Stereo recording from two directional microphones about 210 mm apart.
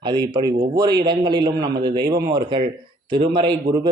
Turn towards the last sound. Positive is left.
turn(degrees=-20)  # may be behind; listen again after turning